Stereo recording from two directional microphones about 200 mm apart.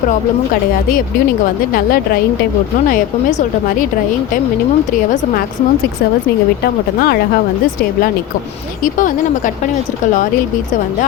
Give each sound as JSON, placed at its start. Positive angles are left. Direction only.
{"t": 2.9, "sound": "a woman's voice", "side_deg": 40}
{"t": 6.6, "sound": "speech", "side_deg": 50}
{"t": 8.8, "sound": "a woman's voice", "side_deg": 40}